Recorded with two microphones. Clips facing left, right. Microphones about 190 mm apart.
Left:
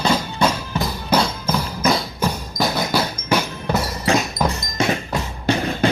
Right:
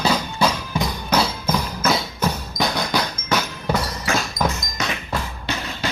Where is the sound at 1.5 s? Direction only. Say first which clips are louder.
Left 2 dB; 10° left (ahead or behind).